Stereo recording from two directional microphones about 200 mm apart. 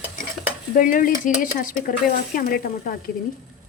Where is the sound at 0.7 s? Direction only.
45° left (ahead or behind).